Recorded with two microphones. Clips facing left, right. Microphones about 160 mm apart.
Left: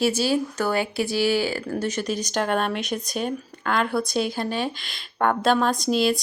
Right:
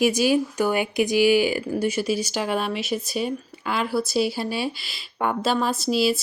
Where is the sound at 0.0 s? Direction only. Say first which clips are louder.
Right 2 dB; 15° right (ahead or behind).